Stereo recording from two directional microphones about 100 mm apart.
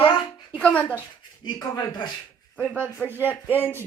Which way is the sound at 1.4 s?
45° left (ahead or behind).